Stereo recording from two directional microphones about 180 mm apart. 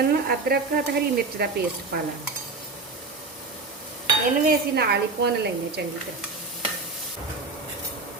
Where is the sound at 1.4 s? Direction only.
65° right (ahead or behind).